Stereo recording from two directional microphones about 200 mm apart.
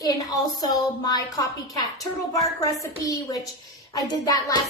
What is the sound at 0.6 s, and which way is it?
A woman's voice, 20° left (ahead or behind).